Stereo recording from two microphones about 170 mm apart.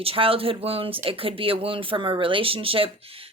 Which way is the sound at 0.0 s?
35° right (ahead or behind).